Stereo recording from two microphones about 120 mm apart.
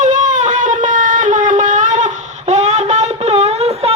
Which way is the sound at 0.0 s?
90° right.